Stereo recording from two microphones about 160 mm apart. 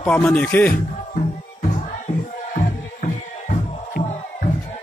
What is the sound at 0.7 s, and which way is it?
Music, 55° left (ahead or behind).